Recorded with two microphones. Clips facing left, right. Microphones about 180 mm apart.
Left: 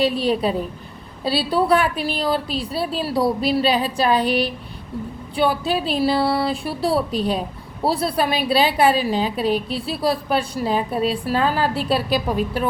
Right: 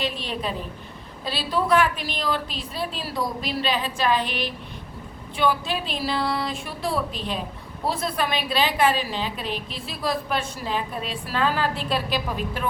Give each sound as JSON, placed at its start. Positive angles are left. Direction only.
{"t": 0.0, "sound": "a woman's voice", "side_deg": 35}
{"t": 5.4, "sound": "a woman's voice", "side_deg": 35}